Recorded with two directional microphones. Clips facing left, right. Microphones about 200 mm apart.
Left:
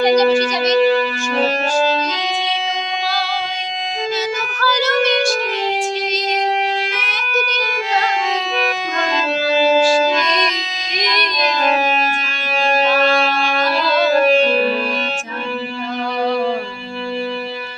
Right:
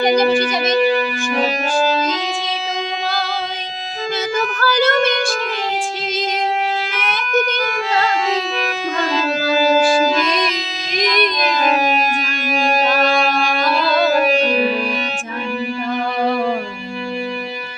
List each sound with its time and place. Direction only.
0.8 s music: 10° right (ahead or behind)
4.6 s child singing: 55° right (ahead or behind)
10.2 s music: 5° right (ahead or behind)
14.1 s music: 10° right (ahead or behind)